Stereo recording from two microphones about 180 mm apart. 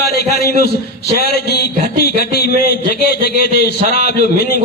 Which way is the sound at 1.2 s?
65° left (ahead or behind).